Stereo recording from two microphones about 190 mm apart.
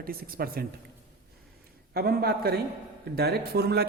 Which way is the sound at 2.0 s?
55° right (ahead or behind).